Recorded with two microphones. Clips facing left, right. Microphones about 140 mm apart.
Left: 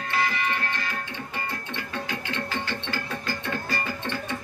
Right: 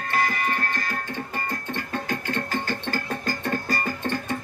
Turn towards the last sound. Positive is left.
turn(degrees=-45)  # may be behind; listen again after turning